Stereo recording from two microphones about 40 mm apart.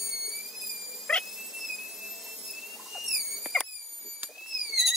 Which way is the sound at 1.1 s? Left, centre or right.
Centre.